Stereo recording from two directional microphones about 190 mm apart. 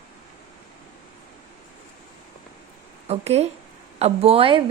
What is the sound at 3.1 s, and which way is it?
A woman's voice, 35° right (ahead or behind).